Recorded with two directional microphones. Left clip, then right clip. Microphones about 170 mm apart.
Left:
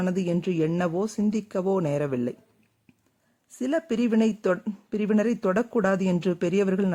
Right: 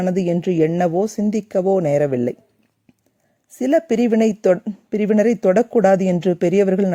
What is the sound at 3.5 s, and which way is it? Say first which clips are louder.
Speech: right 10 dB; 30° right (ahead or behind).